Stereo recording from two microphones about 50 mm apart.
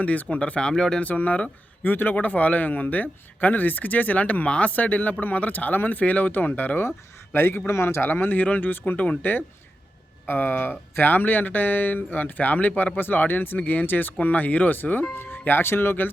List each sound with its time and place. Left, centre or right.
0.0 s speech: left
0.7 s speech: centre
1.0 s speech: left
1.9 s speech: left
7.3 s a man's voice: left